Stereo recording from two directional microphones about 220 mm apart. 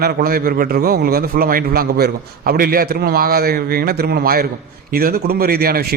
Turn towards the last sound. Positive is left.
turn(degrees=-45)  # may be behind; listen again after turning